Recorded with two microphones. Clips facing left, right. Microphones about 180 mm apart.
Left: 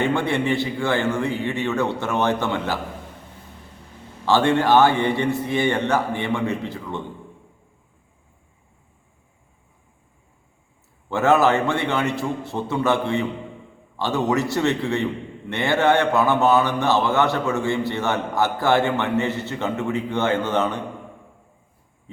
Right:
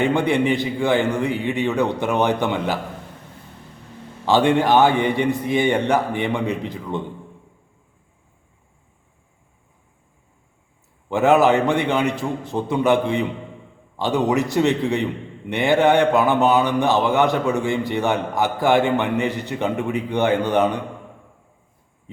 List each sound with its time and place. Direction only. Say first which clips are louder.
0.0 s speech: right 3 dB; 15° right (ahead or behind)
4.3 s speech: right 1 dB; 15° right (ahead or behind)
11.1 s speech: right 2 dB; 15° right (ahead or behind)